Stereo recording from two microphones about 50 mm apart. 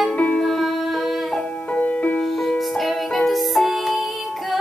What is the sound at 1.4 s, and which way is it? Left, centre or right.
Music, left.